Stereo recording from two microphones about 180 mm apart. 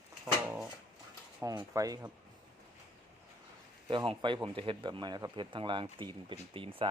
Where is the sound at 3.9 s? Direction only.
25° right (ahead or behind).